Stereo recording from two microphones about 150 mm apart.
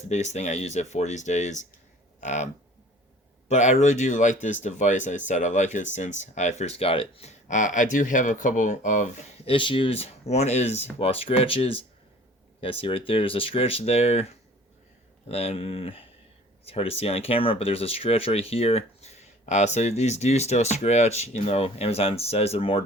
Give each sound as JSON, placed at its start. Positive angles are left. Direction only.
{"t": 0.1, "sound": "speech", "side_deg": 50}
{"t": 3.5, "sound": "speech", "side_deg": 50}
{"t": 9.5, "sound": "speech", "side_deg": 35}
{"t": 15.3, "sound": "speech", "side_deg": 40}